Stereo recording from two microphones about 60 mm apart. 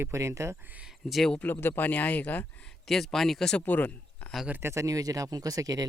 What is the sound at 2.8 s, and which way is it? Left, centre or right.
Speech, centre.